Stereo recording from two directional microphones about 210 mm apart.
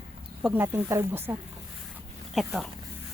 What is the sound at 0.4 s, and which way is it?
Speech, 10° right (ahead or behind).